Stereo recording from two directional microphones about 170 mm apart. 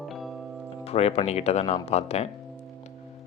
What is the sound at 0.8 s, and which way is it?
Speech, 35° left (ahead or behind).